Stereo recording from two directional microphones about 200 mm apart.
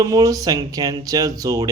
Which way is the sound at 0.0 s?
15° right (ahead or behind).